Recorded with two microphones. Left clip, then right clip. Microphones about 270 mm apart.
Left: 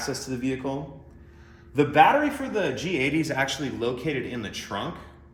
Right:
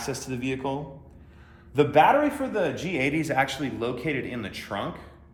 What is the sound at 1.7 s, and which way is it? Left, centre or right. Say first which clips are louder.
A man's voice: even; centre.